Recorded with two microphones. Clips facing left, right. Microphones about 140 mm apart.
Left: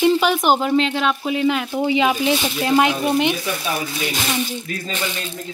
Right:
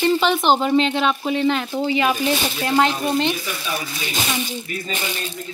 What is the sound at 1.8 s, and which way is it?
Speech, 15° left (ahead or behind).